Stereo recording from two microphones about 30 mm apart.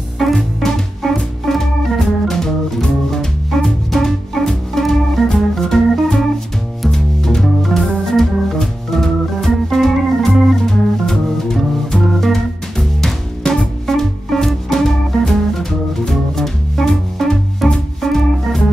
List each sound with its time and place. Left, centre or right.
0.2 s music: centre
1.0 s music: centre
1.4 s organ: centre
6.9 s music: centre
7.4 s organ: centre
10.6 s music: centre
13.8 s music: centre